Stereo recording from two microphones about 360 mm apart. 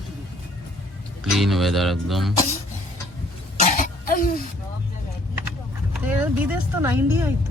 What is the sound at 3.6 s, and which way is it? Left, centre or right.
Throat clearing, left.